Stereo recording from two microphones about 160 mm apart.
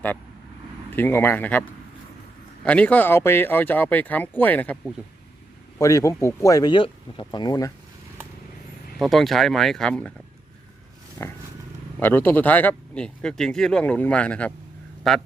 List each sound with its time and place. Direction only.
0.9 s speech: 15° left (ahead or behind)
2.6 s speech: 10° left (ahead or behind)
5.8 s speech: 20° left (ahead or behind)
9.0 s speech: centre (ahead or behind)
11.9 s speech: 10° left (ahead or behind)